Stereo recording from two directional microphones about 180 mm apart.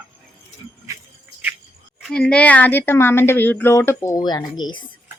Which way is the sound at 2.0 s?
5° left (ahead or behind).